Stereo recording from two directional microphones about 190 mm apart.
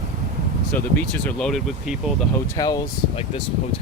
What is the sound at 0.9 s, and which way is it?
Speech, centre (ahead or behind).